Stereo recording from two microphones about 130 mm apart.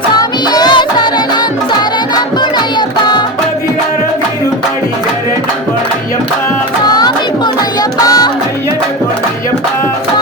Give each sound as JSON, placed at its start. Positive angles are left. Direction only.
{"t": 0.2, "sound": "music", "side_deg": 30}
{"t": 6.8, "sound": "music", "side_deg": 30}